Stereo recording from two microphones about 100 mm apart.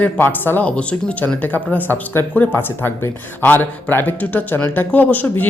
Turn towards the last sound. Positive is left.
turn(degrees=20)  # may be behind; listen again after turning